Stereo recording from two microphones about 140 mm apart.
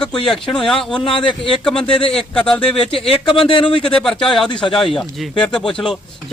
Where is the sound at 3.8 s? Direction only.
5° left (ahead or behind).